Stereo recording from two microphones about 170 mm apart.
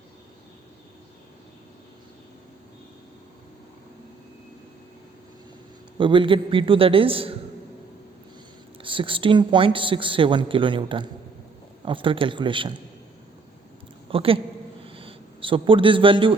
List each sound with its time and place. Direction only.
6.0 s a woman's voice: 30° right (ahead or behind)
8.8 s a woman's voice: 30° right (ahead or behind)
14.1 s a woman's voice: 30° right (ahead or behind)
14.8 s a sound: 30° right (ahead or behind)